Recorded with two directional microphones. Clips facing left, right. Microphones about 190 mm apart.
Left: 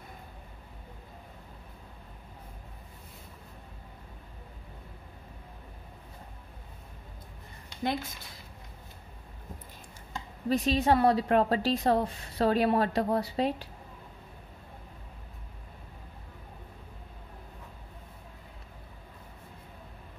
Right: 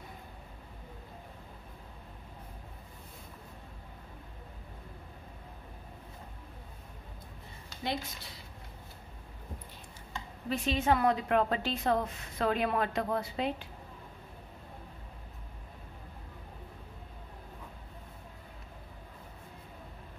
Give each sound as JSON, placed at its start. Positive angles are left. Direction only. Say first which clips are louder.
{"t": 10.1, "sound": "a woman's voice", "louder": "left 6 dB", "side_deg": 40}